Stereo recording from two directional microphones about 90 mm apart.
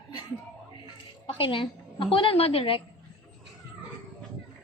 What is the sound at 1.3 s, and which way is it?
A woman's voice, 80° left.